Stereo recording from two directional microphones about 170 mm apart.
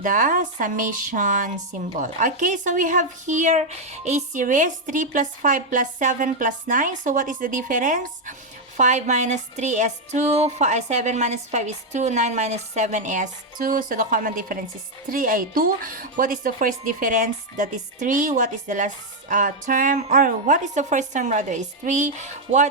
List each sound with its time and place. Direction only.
0.0 s speech: 50° right (ahead or behind)